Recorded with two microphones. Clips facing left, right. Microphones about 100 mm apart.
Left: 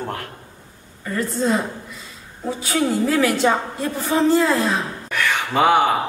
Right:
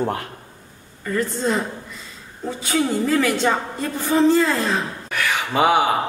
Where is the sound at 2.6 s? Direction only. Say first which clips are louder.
Even; centre (ahead or behind).